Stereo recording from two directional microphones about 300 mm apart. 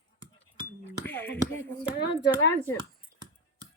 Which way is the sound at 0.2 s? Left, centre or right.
Centre.